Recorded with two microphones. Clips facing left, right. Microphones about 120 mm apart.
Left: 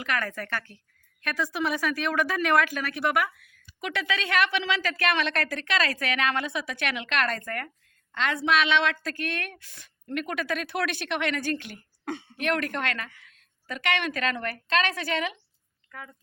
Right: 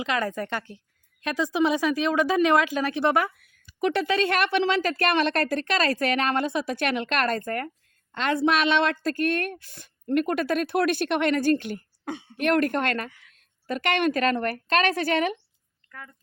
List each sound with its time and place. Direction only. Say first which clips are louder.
0.0 s speech: right 4 dB; 20° right (ahead or behind)
3.3 s a woman's voice: even; 45° right (ahead or behind)